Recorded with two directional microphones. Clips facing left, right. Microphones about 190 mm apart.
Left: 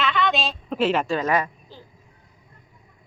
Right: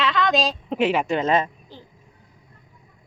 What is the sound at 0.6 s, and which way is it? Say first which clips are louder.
Speech: right 1 dB; 20° right (ahead or behind).